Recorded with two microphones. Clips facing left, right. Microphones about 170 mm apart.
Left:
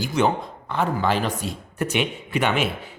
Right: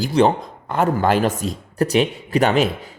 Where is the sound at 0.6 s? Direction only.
45° right (ahead or behind).